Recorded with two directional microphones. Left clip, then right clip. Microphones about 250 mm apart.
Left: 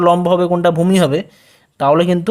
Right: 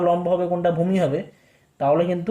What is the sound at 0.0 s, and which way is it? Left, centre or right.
Speech, left.